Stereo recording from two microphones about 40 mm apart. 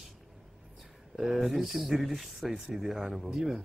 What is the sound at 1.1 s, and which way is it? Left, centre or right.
A man's voice, centre.